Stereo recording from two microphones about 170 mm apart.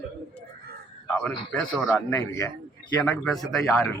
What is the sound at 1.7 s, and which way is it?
Speech, centre (ahead or behind).